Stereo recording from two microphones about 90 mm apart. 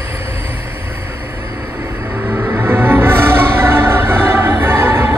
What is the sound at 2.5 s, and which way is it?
Music, 25° right (ahead or behind).